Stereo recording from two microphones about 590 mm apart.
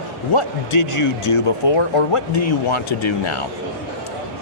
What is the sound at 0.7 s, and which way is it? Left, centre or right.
Speech, left.